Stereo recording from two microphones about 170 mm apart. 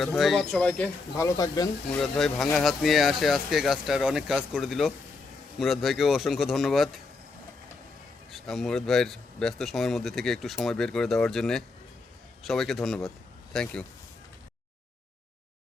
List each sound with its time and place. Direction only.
0.2 s speech: centre (ahead or behind)
1.1 s speech: 20° left (ahead or behind)
2.0 s speech: centre (ahead or behind)
8.3 s speech: centre (ahead or behind)